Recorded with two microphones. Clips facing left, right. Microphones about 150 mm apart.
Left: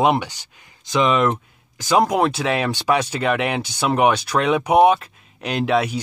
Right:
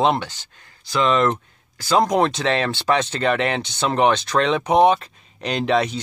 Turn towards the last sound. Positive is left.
turn(degrees=5)  # may be behind; listen again after turning